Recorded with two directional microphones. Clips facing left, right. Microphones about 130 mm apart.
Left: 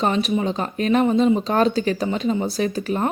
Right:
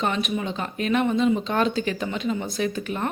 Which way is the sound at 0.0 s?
35° left (ahead or behind).